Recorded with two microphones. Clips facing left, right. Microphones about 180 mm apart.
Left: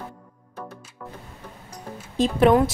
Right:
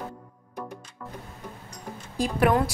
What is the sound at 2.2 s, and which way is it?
Speech, 20° left (ahead or behind).